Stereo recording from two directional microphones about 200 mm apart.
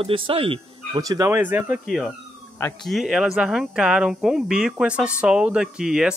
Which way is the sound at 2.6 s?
10° left (ahead or behind).